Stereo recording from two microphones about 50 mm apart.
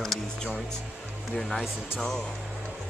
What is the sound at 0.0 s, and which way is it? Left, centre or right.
Music, centre.